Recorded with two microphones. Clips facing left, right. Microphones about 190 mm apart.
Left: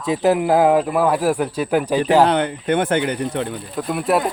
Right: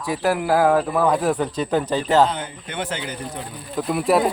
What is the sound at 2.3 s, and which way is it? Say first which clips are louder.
Speech: left 11 dB; 65° left (ahead or behind).